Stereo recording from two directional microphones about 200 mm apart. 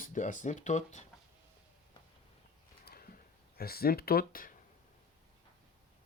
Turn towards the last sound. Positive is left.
turn(degrees=45)  # may be behind; listen again after turning